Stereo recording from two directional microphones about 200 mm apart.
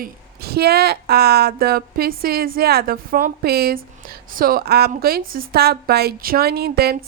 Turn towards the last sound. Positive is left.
turn(degrees=-50)  # may be behind; listen again after turning